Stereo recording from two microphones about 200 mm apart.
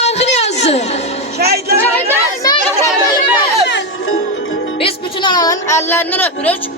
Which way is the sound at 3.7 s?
60° left (ahead or behind).